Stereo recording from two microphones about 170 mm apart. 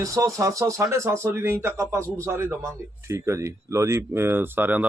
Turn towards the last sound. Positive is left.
turn(degrees=-10)  # may be behind; listen again after turning